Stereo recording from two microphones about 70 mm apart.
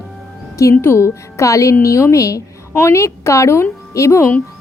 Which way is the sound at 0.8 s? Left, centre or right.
Left.